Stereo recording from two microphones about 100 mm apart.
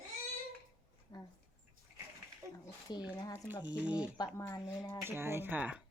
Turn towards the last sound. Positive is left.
turn(degrees=-15)  # may be behind; listen again after turning